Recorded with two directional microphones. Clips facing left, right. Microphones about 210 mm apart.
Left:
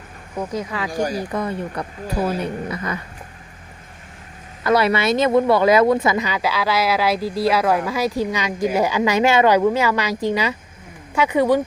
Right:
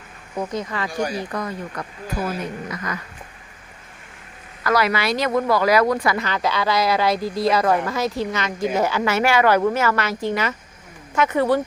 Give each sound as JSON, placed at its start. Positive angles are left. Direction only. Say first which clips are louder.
{"t": 0.3, "sound": "a woman's voice", "louder": "left 1 dB", "side_deg": 5}
{"t": 0.9, "sound": "speech", "louder": "left 4 dB", "side_deg": 40}
{"t": 1.3, "sound": "speech", "louder": "left 4 dB", "side_deg": 25}
{"t": 4.6, "sound": "a woman's voice", "louder": "left 3 dB", "side_deg": 25}